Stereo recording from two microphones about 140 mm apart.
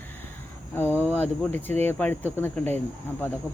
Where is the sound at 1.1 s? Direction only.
15° left (ahead or behind).